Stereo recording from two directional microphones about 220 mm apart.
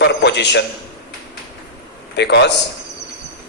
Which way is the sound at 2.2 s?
50° left (ahead or behind).